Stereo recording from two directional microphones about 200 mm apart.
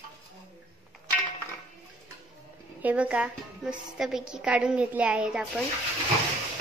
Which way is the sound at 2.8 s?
5° right (ahead or behind).